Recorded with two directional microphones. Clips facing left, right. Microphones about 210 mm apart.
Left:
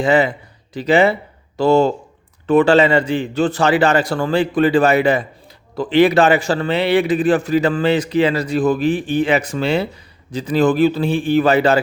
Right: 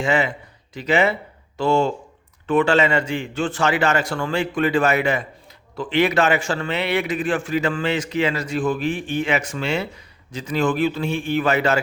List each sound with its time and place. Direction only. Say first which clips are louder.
0.0 s a man's voice: left 6 dB; 35° left (ahead or behind)